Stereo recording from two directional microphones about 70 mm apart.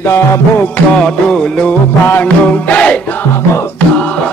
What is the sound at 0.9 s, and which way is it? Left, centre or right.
Music, centre.